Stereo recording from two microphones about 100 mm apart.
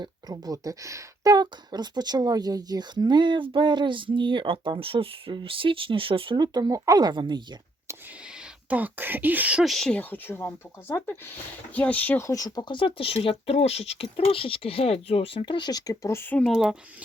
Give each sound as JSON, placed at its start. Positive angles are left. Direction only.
{"t": 0.0, "sound": "speech", "side_deg": -40}
{"t": 6.3, "sound": "speech", "side_deg": -45}
{"t": 8.7, "sound": "speech", "side_deg": -20}
{"t": 9.6, "sound": "speech", "side_deg": 5}
{"t": 10.0, "sound": "speech", "side_deg": 20}
{"t": 16.5, "sound": "speech", "side_deg": -5}